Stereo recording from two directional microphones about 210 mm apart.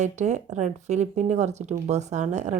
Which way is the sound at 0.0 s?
35° right (ahead or behind).